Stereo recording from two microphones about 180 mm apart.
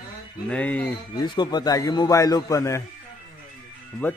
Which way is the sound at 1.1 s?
25° left (ahead or behind).